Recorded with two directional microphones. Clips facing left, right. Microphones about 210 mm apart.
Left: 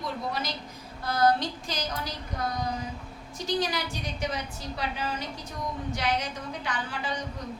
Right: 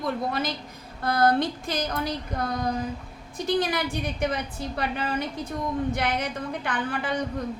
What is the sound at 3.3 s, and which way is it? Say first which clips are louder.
A woman's voice: right 4 dB; 55° right (ahead or behind).